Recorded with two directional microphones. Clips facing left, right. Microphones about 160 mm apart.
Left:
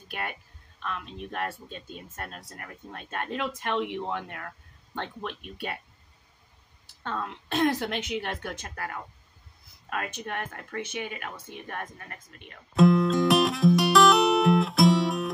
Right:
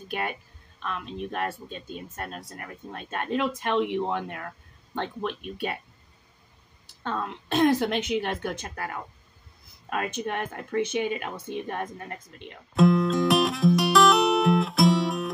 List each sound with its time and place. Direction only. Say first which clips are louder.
0.8 s speech: right 3 dB; 20° right (ahead or behind)
7.0 s speech: right 3 dB; 25° right (ahead or behind)
12.7 s music: even; centre (ahead or behind)